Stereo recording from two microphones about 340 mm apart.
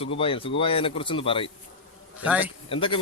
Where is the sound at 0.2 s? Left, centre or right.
Centre.